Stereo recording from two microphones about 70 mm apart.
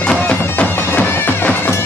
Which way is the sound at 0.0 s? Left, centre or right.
Centre.